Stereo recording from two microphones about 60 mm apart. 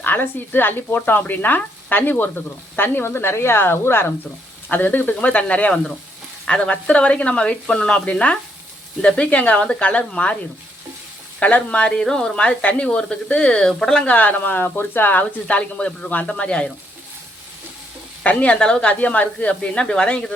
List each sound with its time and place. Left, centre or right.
0.0 s frying: left
4.7 s speech: left
11.3 s speech: left
18.2 s speech: left